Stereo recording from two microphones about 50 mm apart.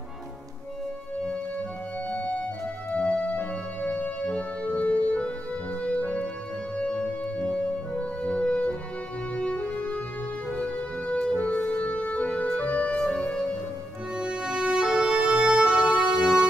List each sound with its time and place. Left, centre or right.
2.0 s music: left
12.7 s music: centre
14.1 s music: centre